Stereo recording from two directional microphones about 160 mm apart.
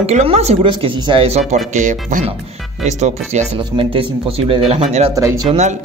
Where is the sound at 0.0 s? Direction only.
40° right (ahead or behind).